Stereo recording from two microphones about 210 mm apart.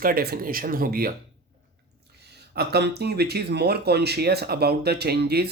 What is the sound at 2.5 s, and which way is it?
Speech, 50° right (ahead or behind).